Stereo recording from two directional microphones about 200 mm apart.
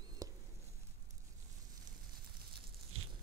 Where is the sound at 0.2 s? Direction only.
15° right (ahead or behind).